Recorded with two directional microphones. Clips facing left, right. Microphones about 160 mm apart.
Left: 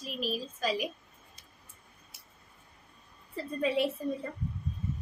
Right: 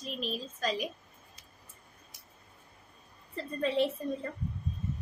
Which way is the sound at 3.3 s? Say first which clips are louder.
Left 1 dB; 10° left (ahead or behind).